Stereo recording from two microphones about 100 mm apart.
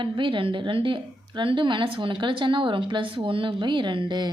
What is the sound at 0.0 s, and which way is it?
A woman's voice, 55° right (ahead or behind).